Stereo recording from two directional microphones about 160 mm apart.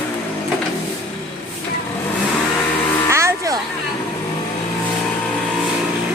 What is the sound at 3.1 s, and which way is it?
Vehicle, 15° right (ahead or behind).